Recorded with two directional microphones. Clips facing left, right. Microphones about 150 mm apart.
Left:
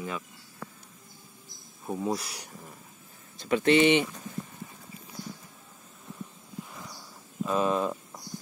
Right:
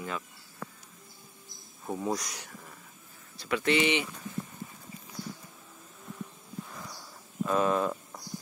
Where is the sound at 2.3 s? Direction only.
15° left (ahead or behind).